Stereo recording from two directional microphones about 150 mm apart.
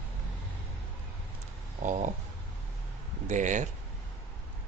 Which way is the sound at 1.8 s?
50° right (ahead or behind).